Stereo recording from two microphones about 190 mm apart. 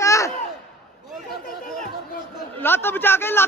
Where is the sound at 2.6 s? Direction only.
10° left (ahead or behind).